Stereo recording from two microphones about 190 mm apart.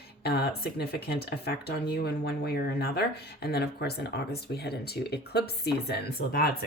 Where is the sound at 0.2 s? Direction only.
55° left (ahead or behind).